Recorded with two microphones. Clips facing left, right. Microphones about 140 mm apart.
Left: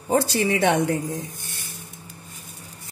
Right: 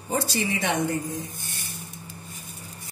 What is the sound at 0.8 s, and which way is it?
Speech, 75° left (ahead or behind).